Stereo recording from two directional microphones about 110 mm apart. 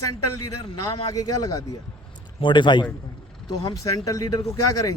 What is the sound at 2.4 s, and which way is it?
Speech, 45° left (ahead or behind).